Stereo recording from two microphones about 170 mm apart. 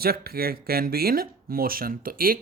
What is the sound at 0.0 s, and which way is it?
Speech, 65° right (ahead or behind).